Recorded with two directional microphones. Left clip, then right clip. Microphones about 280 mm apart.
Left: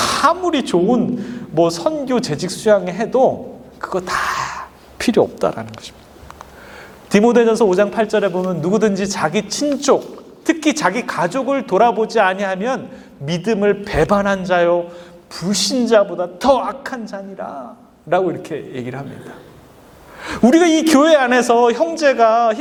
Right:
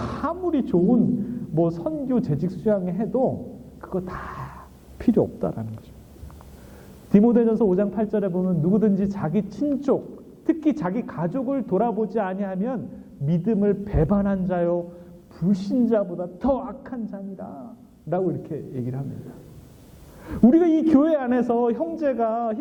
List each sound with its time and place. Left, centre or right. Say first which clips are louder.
0.0 s a woman's voice: left 12 dB; centre
3.2 s a man's voice: left 10 dB; left
3.8 s a sound: left 12 dB; centre
5.4 s a woman's voice: left 10 dB; centre
7.1 s a woman's voice: left 7 dB; centre